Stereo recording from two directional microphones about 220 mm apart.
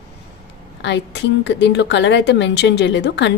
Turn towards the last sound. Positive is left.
turn(degrees=55)  # may be behind; listen again after turning